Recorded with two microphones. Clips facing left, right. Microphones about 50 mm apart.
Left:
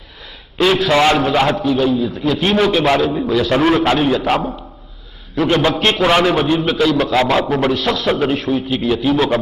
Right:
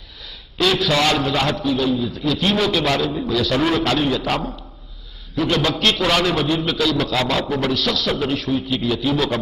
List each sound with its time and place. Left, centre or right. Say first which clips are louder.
0.6 s a man's voice: left 5 dB; left
3.1 s a man's voice: left 5 dB; centre
3.3 s a man's voice: left 5 dB; left
5.4 s a man's voice: left 4 dB; left